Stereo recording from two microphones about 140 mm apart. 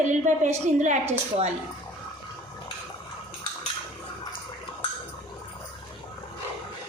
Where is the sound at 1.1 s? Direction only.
50° right (ahead or behind).